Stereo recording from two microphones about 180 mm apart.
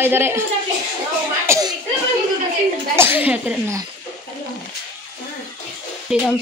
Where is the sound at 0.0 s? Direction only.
10° right (ahead or behind).